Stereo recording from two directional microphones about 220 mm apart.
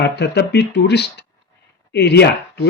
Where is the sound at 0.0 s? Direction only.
50° left (ahead or behind).